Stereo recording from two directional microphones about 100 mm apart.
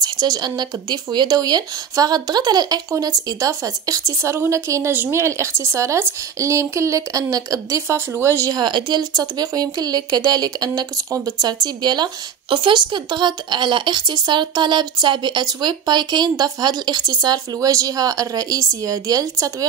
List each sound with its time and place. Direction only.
0.0 s a woman's voice: 40° right (ahead or behind)
8.5 s speech: 50° right (ahead or behind)